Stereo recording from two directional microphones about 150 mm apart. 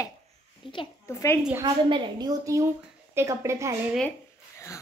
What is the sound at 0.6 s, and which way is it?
Speech, 35° left (ahead or behind).